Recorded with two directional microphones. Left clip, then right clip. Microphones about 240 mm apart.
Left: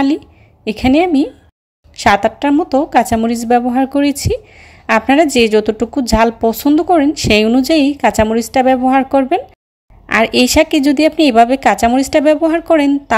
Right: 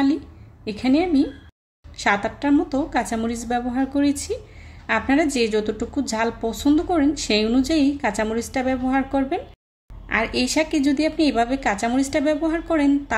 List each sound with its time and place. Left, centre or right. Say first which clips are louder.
0.7 s a woman's voice: left 9 dB; left